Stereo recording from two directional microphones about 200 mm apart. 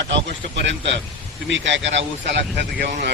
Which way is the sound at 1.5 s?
65° right (ahead or behind).